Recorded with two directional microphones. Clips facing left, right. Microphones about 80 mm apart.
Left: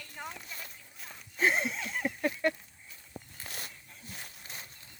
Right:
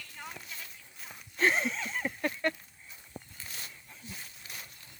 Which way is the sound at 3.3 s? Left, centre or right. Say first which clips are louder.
Left 2 dB; left.